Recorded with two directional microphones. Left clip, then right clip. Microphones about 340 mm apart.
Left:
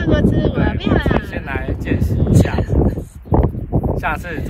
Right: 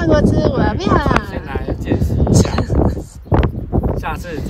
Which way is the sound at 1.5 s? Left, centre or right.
Centre.